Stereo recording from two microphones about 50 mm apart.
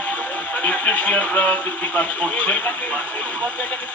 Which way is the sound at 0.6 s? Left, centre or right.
Left.